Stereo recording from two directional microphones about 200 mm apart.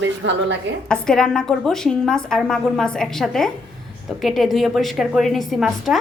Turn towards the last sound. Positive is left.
turn(degrees=0)  # may be behind; listen again after turning